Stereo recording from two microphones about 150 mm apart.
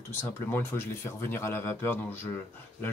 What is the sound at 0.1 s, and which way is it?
Speech, 15° left (ahead or behind).